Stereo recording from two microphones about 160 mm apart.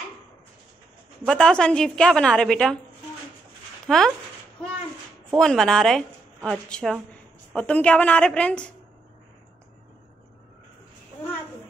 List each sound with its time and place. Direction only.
1.2 s a woman's voice: 5° left (ahead or behind)
3.8 s speech: centre (ahead or behind)
5.3 s a woman's voice: 5° left (ahead or behind)